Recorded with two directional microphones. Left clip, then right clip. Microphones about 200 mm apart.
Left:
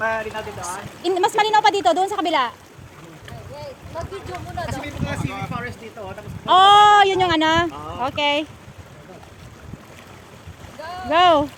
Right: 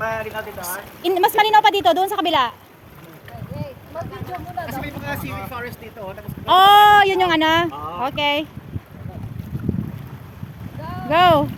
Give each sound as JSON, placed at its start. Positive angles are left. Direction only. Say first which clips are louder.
{"t": 0.0, "sound": "a sound", "louder": "left 1 dB", "side_deg": -40}
{"t": 1.0, "sound": "speech", "louder": "right 2 dB", "side_deg": -20}
{"t": 5.0, "sound": "speech", "louder": "right 1 dB", "side_deg": -25}
{"t": 5.5, "sound": "speech", "louder": "even", "side_deg": -45}
{"t": 6.4, "sound": "speech", "louder": "right 1 dB", "side_deg": -15}
{"t": 11.1, "sound": "speech", "louder": "right 1 dB", "side_deg": -15}